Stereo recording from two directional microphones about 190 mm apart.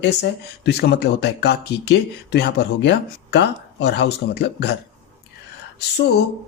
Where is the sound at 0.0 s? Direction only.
65° left (ahead or behind).